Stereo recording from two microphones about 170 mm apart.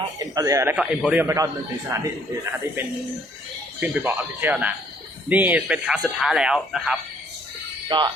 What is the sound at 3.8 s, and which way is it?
Speech, 10° right (ahead or behind).